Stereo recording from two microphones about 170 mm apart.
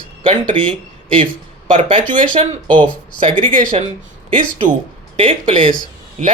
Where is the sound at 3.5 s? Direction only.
50° right (ahead or behind).